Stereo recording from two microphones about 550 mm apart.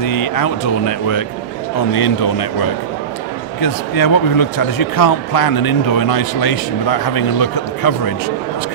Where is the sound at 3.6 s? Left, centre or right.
Left.